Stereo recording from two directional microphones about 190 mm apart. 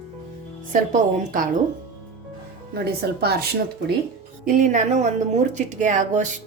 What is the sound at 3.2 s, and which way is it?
Speech, 55° right (ahead or behind).